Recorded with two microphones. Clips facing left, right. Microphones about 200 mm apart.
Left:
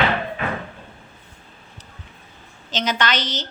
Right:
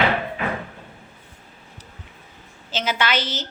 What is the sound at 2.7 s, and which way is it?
Speech, 5° right (ahead or behind).